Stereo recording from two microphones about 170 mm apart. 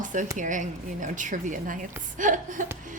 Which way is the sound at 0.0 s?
50° right (ahead or behind).